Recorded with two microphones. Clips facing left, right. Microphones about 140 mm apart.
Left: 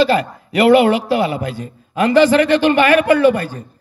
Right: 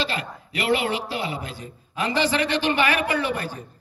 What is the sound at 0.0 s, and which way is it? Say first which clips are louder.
A man's voice: left 13 dB; 50° left (ahead or behind).